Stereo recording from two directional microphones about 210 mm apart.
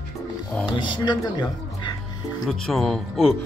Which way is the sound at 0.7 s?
20° left (ahead or behind).